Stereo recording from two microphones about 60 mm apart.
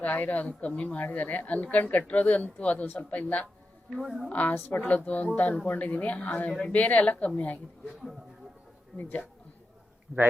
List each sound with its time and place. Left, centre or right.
0.0 s speech: left
4.0 s a woman's voice: centre
4.3 s speech: left
9.0 s speech: left